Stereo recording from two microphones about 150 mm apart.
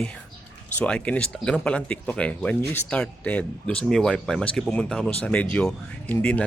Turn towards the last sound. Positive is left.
turn(degrees=10)  # may be behind; listen again after turning